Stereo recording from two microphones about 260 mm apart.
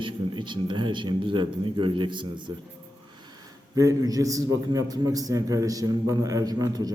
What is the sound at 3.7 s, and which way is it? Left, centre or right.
A man's voice, centre.